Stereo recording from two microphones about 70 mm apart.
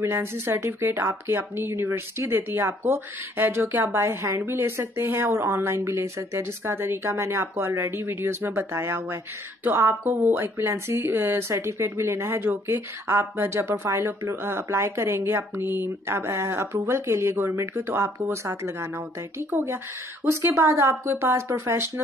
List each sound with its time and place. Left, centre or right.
0.0 s speech: right
4.0 s speech: right